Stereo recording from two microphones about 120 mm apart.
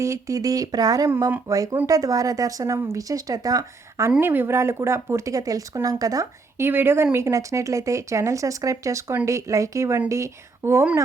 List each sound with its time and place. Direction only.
0.0 s speech: 25° right (ahead or behind)
6.7 s speech: 20° right (ahead or behind)